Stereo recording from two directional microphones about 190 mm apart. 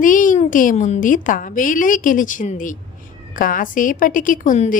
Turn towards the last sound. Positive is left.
turn(degrees=40)  # may be behind; listen again after turning